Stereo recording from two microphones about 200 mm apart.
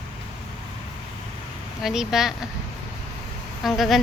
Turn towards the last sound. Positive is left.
turn(degrees=0)  # may be behind; listen again after turning